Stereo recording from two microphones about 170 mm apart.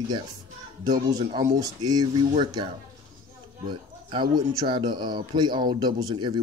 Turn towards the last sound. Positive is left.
turn(degrees=-25)  # may be behind; listen again after turning